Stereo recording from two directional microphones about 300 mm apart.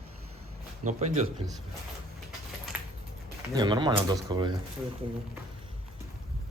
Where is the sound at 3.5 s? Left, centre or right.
Centre.